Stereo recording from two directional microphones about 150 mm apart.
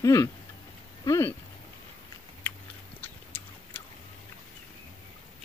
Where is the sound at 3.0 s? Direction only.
10° left (ahead or behind).